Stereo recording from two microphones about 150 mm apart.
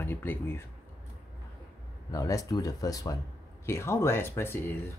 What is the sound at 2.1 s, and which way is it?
Speech, 20° left (ahead or behind).